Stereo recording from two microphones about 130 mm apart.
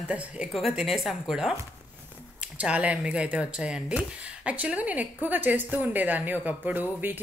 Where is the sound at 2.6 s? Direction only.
10° right (ahead or behind).